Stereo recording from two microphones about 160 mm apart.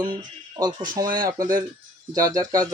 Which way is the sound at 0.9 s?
25° right (ahead or behind).